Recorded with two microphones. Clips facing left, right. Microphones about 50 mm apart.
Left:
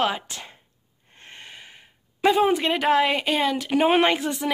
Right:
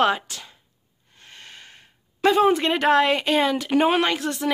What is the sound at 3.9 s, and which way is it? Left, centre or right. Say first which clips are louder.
Speech: left 2 dB; left.